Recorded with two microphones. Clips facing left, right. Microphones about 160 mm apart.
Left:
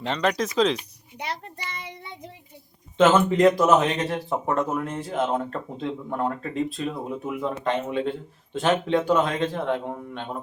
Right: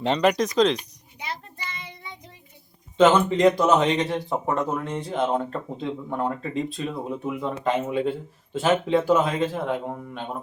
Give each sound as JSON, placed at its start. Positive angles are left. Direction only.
{"t": 0.0, "sound": "speech", "side_deg": -20}
{"t": 0.3, "sound": "speech", "side_deg": 0}
{"t": 3.0, "sound": "speech", "side_deg": 5}